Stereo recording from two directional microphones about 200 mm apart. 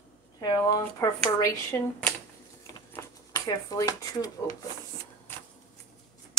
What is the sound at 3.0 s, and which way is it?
Speech, 15° left (ahead or behind).